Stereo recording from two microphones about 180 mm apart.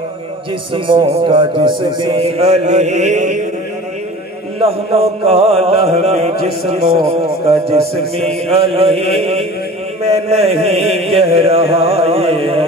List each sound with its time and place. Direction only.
0.7 s speech: 30° right (ahead or behind)
1.2 s music: 30° right (ahead or behind)
4.6 s music: 35° right (ahead or behind)